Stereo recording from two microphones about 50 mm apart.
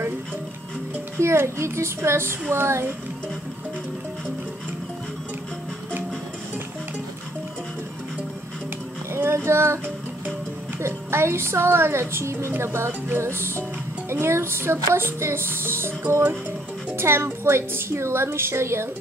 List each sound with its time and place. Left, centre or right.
1.2 s a woman's voice: right
9.1 s speech: right
10.8 s a woman's voice: right
16.9 s a woman's voice: right